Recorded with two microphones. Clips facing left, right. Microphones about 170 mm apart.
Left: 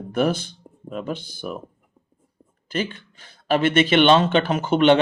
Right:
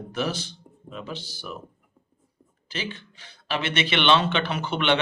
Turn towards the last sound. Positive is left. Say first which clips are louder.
# left 8 dB
turn(degrees=40)  # may be behind; listen again after turning